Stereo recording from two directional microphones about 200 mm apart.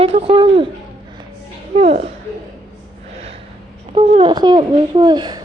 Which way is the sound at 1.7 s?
30° right (ahead or behind).